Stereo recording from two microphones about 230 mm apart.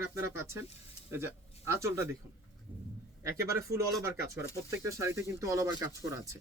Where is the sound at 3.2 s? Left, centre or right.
Centre.